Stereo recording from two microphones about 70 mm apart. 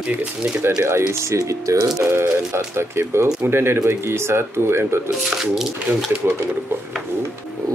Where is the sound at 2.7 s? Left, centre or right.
Right.